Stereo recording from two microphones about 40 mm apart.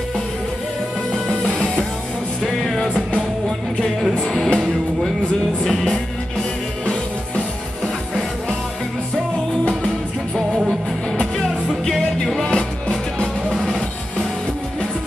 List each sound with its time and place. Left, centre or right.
1.3 s music: centre
2.4 s music: centre
4.2 s music: centre
5.6 s music: centre
11.9 s music: centre
12.4 s music: left